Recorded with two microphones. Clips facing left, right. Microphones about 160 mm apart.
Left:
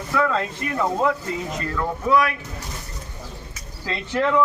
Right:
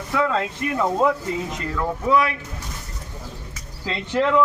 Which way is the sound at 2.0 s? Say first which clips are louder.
Even; 20° right (ahead or behind).